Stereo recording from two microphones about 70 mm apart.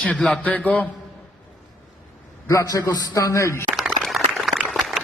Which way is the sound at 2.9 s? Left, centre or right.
Left.